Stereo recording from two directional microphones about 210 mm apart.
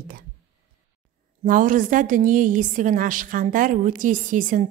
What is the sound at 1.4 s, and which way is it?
A woman's voice, 40° right (ahead or behind).